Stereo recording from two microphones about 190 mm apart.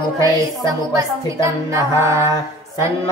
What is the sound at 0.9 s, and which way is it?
Speech, 15° right (ahead or behind).